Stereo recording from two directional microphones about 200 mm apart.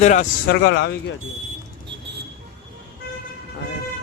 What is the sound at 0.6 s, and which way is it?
Speech, 60° left (ahead or behind).